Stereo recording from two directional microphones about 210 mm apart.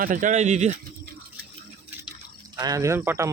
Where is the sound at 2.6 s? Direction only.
15° right (ahead or behind).